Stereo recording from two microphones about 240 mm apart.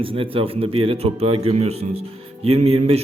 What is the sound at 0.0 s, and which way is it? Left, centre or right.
A man's voice, right.